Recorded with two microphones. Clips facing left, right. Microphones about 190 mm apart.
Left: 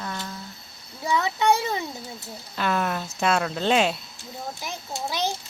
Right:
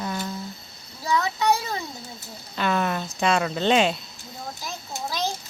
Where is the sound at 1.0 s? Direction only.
15° left (ahead or behind).